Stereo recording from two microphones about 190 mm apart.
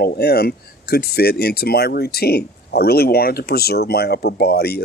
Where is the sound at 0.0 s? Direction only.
55° left (ahead or behind).